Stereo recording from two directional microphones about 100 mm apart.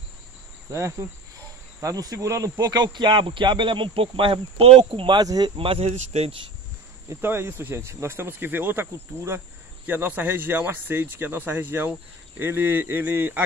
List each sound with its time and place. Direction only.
0.7 s cricket: 30° right (ahead or behind)
1.8 s speech: 35° right (ahead or behind); by 5.2 s 60° right (ahead or behind)
5.2 s cricket: 40° right (ahead or behind)
5.6 s speech: 75° right (ahead or behind)
7.1 s speech: 25° right (ahead or behind)